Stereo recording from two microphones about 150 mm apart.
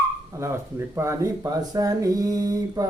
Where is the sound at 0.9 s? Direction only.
20° right (ahead or behind).